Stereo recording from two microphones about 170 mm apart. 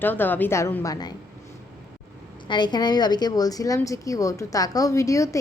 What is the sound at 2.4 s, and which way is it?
A woman's voice, 25° left (ahead or behind).